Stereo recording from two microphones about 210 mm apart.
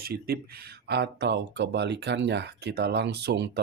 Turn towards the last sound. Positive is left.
turn(degrees=-50)  # may be behind; listen again after turning